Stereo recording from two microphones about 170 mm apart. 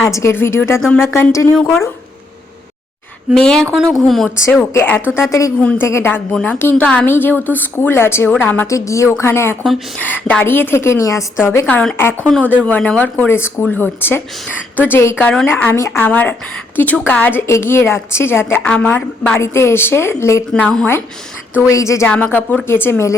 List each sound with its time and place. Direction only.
0.1 s a woman's voice: 15° left (ahead or behind)
0.8 s a woman's voice: centre (ahead or behind)
1.1 s a woman's voice: 15° left (ahead or behind)
1.5 s a woman's voice: centre (ahead or behind)
3.3 s a woman's voice: 5° left (ahead or behind)
4.5 s a woman's voice: 10° left (ahead or behind)
5.0 s a woman's voice: 5° right (ahead or behind)
5.5 s a woman's voice: 10° left (ahead or behind)
9.6 s a woman's voice: 5° left (ahead or behind)
20.5 s a woman's voice: 5° left (ahead or behind)
21.7 s a woman's voice: 15° left (ahead or behind)